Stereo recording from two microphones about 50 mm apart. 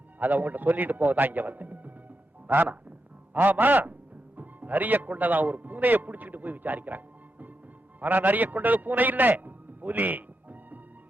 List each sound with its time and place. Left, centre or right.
0.2 s a man's voice: right